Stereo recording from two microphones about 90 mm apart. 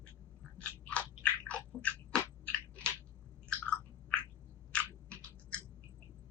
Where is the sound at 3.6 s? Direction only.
15° left (ahead or behind).